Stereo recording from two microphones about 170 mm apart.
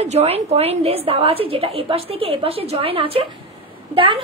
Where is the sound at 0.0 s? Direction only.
40° right (ahead or behind).